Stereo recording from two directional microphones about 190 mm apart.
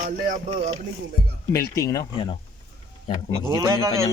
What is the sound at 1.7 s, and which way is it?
Speech, 15° left (ahead or behind).